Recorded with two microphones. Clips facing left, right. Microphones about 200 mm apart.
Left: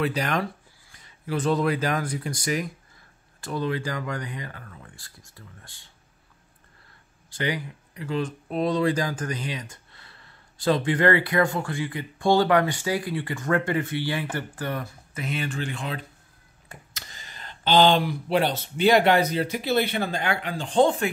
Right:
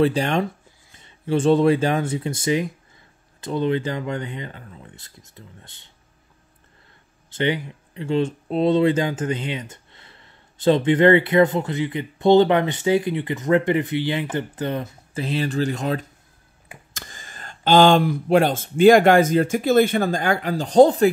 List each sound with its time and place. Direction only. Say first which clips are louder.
0.0 s speech: right 6 dB; 30° right (ahead or behind)
7.2 s speech: right 6 dB; 25° right (ahead or behind)